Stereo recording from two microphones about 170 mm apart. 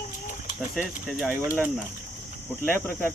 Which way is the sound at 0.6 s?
5° right (ahead or behind).